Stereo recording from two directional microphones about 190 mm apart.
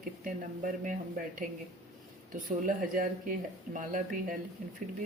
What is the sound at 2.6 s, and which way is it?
Speech, 45° right (ahead or behind).